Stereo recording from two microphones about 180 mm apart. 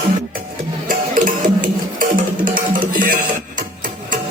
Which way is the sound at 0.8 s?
50° right (ahead or behind).